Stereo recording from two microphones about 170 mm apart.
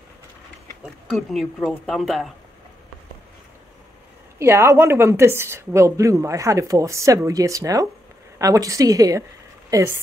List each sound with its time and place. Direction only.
0.8 s speech: centre (ahead or behind)
4.4 s a woman's voice: 15° right (ahead or behind)